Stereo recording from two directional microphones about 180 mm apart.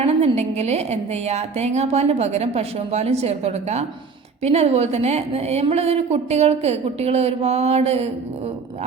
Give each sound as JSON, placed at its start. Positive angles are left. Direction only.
{"t": 0.0, "sound": "a woman's voice", "side_deg": -35}